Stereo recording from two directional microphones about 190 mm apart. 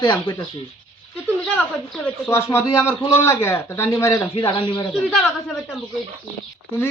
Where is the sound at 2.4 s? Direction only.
15° left (ahead or behind).